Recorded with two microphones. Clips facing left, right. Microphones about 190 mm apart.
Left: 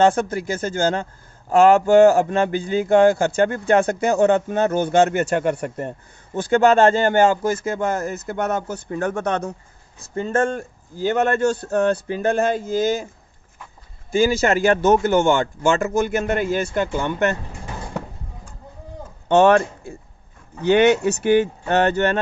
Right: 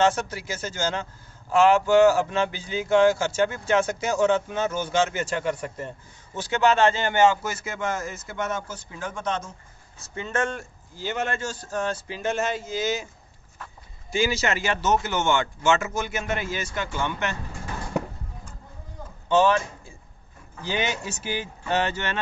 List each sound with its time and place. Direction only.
0.0 s a man's voice: 55° left (ahead or behind)
10.1 s a man's voice: 45° left (ahead or behind)
14.1 s speech: 50° left (ahead or behind)
19.2 s a man's voice: 65° left (ahead or behind)